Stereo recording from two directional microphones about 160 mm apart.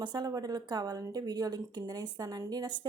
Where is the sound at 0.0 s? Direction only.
25° right (ahead or behind).